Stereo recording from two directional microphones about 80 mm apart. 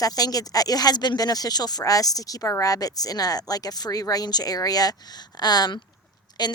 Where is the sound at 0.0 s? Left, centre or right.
Left.